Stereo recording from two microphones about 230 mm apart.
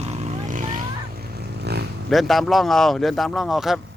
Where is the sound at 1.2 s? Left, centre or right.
Right.